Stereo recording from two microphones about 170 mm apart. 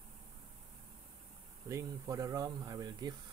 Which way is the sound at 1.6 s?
20° right (ahead or behind).